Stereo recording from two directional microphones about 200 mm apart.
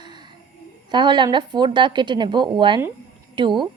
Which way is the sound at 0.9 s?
25° right (ahead or behind).